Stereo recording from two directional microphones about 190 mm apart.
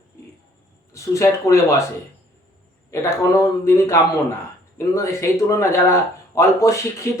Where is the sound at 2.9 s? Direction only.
15° left (ahead or behind).